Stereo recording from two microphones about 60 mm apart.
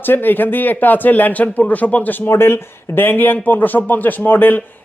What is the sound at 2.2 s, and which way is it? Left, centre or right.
Speech, left.